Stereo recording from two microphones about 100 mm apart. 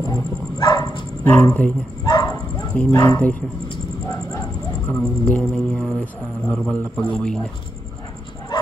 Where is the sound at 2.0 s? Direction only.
40° left (ahead or behind).